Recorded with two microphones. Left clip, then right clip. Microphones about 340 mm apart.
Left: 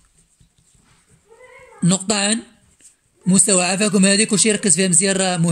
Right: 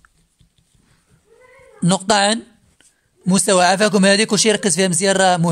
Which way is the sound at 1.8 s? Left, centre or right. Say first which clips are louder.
Right 5 dB; right.